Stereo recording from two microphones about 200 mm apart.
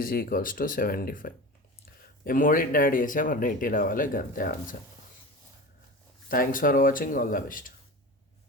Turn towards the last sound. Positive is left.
turn(degrees=45)  # may be behind; listen again after turning